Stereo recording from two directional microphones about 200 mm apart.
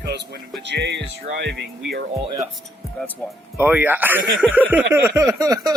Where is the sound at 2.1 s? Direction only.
15° right (ahead or behind).